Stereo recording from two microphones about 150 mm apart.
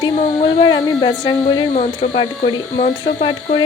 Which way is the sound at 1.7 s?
50° left (ahead or behind).